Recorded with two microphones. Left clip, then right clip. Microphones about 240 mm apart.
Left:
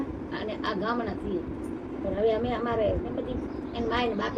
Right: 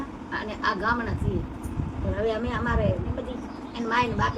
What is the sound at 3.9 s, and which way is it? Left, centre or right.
Speech, centre.